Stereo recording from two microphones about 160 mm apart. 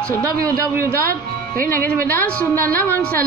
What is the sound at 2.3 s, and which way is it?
Speech, 10° left (ahead or behind).